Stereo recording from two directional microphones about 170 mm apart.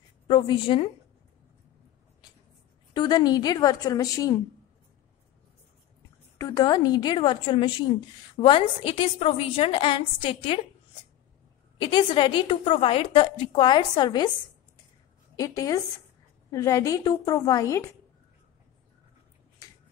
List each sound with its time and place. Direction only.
0.3 s a woman's voice: 30° left (ahead or behind)
2.9 s a woman's voice: 25° left (ahead or behind)
6.3 s a woman's voice: 20° left (ahead or behind)
11.8 s a woman's voice: 30° left (ahead or behind)
15.3 s a woman's voice: 20° left (ahead or behind)